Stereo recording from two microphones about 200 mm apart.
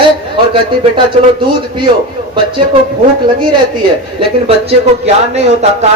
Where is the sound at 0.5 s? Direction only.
25° right (ahead or behind).